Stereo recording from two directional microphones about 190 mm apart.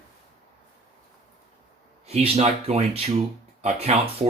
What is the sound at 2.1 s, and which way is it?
Speech, 35° right (ahead or behind).